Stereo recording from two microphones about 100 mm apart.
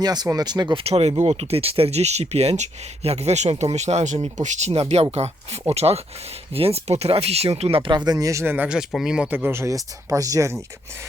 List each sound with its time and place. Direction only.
0.0 s speech: 45° right (ahead or behind)
0.8 s speech: 85° right
6.5 s speech: 80° right
7.9 s speech: 45° right (ahead or behind)
8.5 s speech: 10° right (ahead or behind); by 10.6 s 30° right (ahead or behind)